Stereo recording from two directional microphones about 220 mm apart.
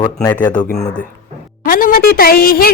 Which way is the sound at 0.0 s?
15° left (ahead or behind).